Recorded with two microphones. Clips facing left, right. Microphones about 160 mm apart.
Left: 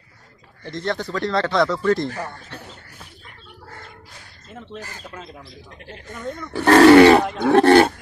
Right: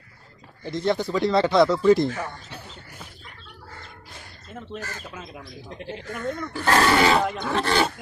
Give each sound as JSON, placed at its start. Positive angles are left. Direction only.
{"t": 0.7, "sound": "speech", "side_deg": -5}
{"t": 5.7, "sound": "speech", "side_deg": -25}
{"t": 6.5, "sound": "speech", "side_deg": 75}
{"t": 7.4, "sound": "speech", "side_deg": 60}